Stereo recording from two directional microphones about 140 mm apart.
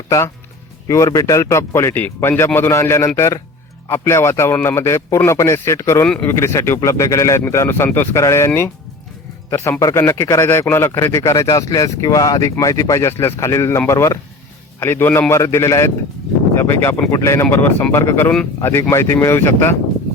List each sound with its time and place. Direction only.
0.9 s a man's voice: 25° left (ahead or behind)
6.1 s speech: 10° left (ahead or behind)
6.3 s a man's voice: 20° left (ahead or behind)